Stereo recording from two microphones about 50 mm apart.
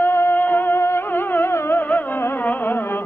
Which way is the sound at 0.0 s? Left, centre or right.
Left.